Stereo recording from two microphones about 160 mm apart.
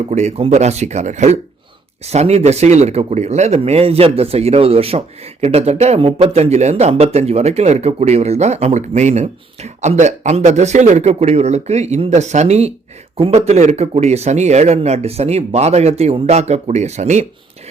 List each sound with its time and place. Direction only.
0.1 s speech: 45° right (ahead or behind)